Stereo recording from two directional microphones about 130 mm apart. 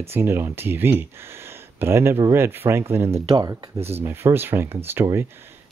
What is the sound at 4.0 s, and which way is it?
Speech, 15° right (ahead or behind).